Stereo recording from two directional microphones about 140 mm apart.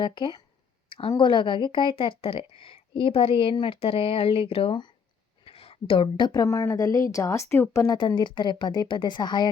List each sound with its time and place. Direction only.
0.0 s a woman's voice: 35° left (ahead or behind)
7.9 s a woman's voice: 35° left (ahead or behind)